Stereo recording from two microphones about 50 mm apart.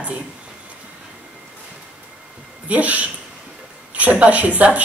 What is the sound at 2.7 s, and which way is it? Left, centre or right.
Speech, right.